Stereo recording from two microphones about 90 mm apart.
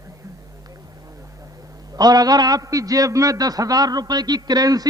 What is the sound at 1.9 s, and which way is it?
A man's voice, 45° right (ahead or behind).